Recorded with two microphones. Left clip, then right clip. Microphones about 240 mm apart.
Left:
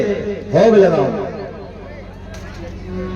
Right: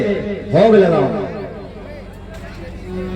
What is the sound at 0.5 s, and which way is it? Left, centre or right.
Speech, right.